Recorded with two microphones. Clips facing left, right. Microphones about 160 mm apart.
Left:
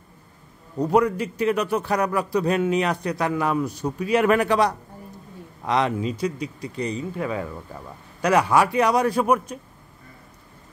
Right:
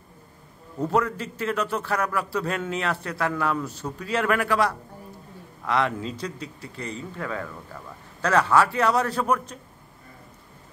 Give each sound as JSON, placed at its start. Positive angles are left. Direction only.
{"t": 0.7, "sound": "a man's voice", "side_deg": 15}